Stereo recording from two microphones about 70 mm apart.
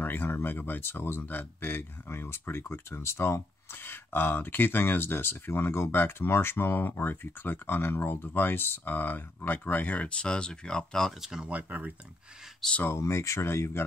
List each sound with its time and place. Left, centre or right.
0.0 s speech: left; by 11.1 s centre
11.1 s speech: centre
11.4 s speech: right
12.8 s speech: left